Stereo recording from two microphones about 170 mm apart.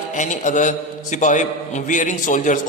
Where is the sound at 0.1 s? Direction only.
45° left (ahead or behind).